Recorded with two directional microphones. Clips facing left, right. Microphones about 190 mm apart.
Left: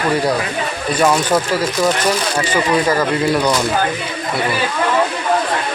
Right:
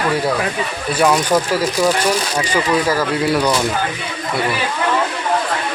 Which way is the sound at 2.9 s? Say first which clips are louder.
Left 1 dB; 5° right (ahead or behind).